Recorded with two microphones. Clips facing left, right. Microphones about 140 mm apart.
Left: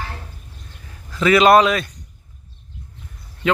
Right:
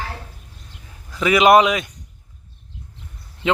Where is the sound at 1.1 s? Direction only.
15° right (ahead or behind).